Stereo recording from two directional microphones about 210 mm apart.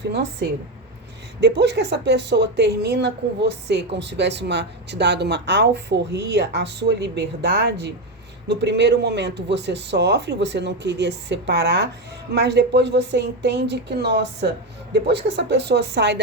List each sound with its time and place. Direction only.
1.4 s speech: 50° right (ahead or behind)